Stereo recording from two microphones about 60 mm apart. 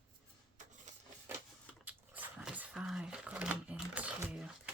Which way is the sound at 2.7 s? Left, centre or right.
Centre.